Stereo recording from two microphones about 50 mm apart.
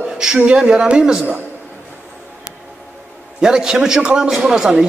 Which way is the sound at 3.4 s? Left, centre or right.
Centre.